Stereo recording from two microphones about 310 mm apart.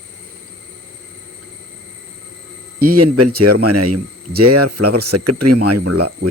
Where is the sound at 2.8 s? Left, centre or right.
Right.